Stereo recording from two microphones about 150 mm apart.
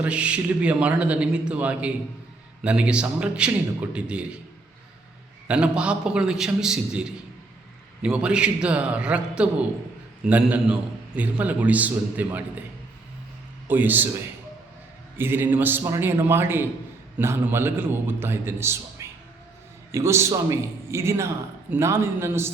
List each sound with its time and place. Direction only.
0.0 s a man's voice: 10° right (ahead or behind)
5.5 s a man's voice: 5° right (ahead or behind)
13.7 s a man's voice: 10° right (ahead or behind)
15.2 s a man's voice: 15° right (ahead or behind)